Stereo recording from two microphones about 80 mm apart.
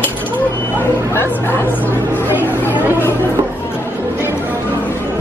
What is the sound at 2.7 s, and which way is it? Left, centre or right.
Chatter, right.